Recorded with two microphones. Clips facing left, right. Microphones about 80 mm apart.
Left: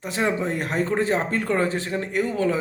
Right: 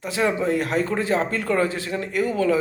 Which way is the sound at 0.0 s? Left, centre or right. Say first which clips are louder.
Right 2 dB; left.